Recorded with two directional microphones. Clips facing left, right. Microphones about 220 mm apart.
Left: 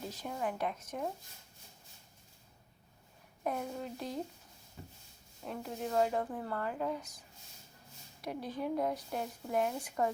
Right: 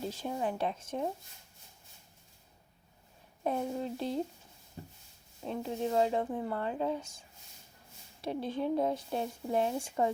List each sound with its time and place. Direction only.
0.1 s a woman's voice: 25° right (ahead or behind)
3.4 s a woman's voice: 30° right (ahead or behind)
4.8 s rub: 40° right (ahead or behind)
5.5 s a woman's voice: 25° right (ahead or behind)